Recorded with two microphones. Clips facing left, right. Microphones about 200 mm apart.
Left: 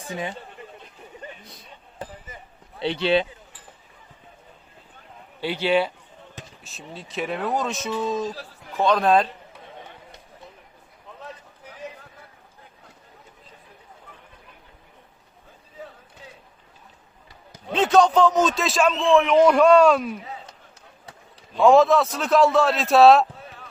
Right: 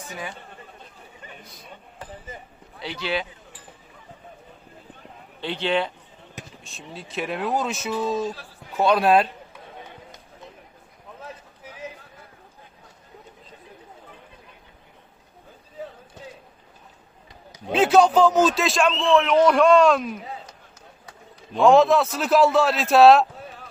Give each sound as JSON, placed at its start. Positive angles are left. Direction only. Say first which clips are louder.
{"t": 0.1, "sound": "speech", "louder": "left 6 dB", "side_deg": 25}
{"t": 2.7, "sound": "speech", "louder": "left 7 dB", "side_deg": 25}
{"t": 5.4, "sound": "a man's voice", "louder": "left 3 dB", "side_deg": 10}
{"t": 17.7, "sound": "a man's voice", "louder": "right 1 dB", "side_deg": -5}
{"t": 21.6, "sound": "a man's voice", "louder": "even", "side_deg": 0}